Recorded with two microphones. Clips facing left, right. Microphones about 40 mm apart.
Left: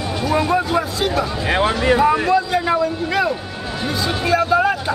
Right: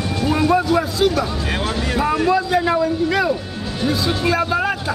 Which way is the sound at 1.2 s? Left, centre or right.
Left.